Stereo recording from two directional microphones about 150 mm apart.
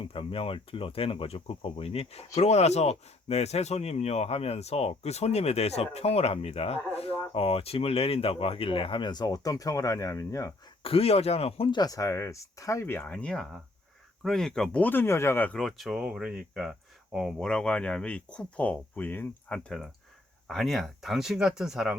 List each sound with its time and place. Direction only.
0.0 s speech: 35° left (ahead or behind); by 10.5 s 20° left (ahead or behind)
10.8 s speech: 40° left (ahead or behind); by 15.5 s 15° left (ahead or behind)
15.5 s speech: centre (ahead or behind)